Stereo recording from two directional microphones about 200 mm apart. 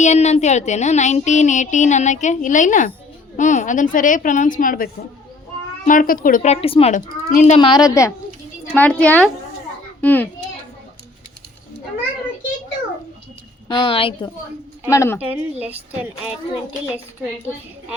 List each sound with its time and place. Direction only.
0.0 s child singing: 35° left (ahead or behind)
7.6 s a woman's voice: 20° left (ahead or behind)
13.7 s a woman's voice: 25° left (ahead or behind)
14.8 s a woman's voice: 15° left (ahead or behind)
15.2 s speech: 5° right (ahead or behind)